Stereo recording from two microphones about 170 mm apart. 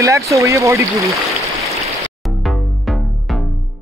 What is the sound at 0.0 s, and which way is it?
Speech, 20° right (ahead or behind).